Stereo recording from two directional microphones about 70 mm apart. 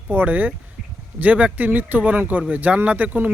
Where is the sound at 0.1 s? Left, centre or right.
Right.